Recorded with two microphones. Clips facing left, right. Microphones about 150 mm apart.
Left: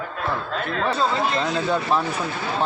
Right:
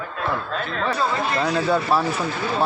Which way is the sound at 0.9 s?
20° left (ahead or behind).